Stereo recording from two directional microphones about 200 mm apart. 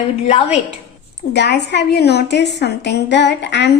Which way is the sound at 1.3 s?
55° left (ahead or behind).